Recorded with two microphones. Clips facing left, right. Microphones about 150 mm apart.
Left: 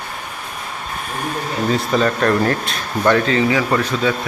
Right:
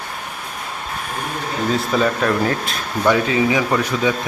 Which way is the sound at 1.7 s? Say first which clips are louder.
Left 1 dB; 5° right (ahead or behind).